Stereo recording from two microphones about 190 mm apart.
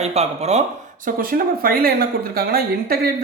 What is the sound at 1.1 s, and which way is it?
Speech, 45° right (ahead or behind).